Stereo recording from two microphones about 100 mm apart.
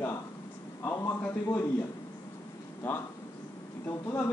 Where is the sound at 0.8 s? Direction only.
25° left (ahead or behind).